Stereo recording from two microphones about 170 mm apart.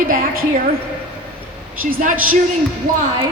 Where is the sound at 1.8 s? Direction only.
55° right (ahead or behind).